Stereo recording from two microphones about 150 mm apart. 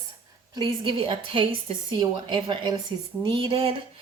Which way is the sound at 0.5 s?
30° right (ahead or behind).